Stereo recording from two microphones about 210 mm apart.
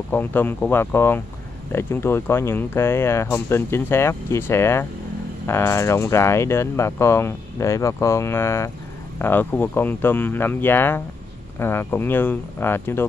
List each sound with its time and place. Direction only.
0.1 s speech: 10° left (ahead or behind)